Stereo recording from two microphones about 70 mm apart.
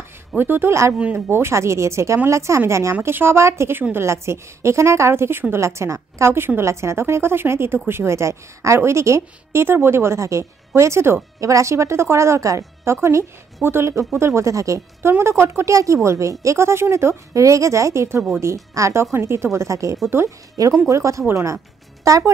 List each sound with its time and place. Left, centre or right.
0.4 s a woman's voice: right
15.0 s a woman's voice: right
21.3 s a woman's voice: right
22.0 s speech: right